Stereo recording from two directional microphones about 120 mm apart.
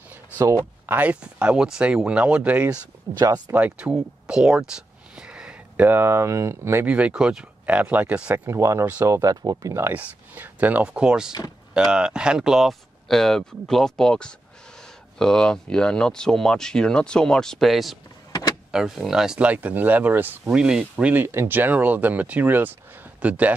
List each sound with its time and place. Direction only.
0.4 s speech: 25° right (ahead or behind)
3.2 s speech: 35° right (ahead or behind)
3.5 s speech: 10° right (ahead or behind)
8.5 s speech: 25° right (ahead or behind)